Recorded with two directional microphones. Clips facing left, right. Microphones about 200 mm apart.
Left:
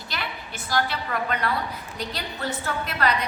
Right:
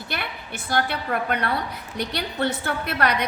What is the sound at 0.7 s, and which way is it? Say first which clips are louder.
A woman's voice: right 2 dB; 55° right (ahead or behind).